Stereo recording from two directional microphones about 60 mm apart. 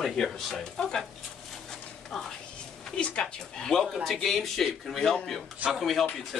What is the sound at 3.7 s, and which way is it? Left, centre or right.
A man's voice, centre.